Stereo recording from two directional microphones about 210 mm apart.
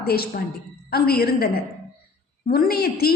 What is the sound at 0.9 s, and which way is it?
A woman's voice, 45° left (ahead or behind).